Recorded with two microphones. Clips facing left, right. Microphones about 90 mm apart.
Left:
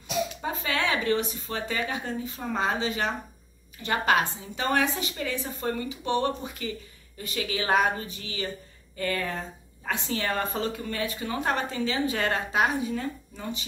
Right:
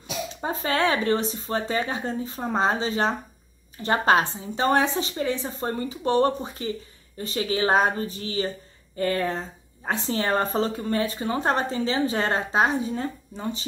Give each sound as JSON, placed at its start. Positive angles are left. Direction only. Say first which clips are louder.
{"t": 0.3, "sound": "a woman's voice", "louder": "right 4 dB", "side_deg": -35}